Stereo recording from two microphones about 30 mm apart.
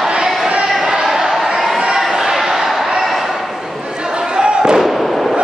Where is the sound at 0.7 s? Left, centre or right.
Centre.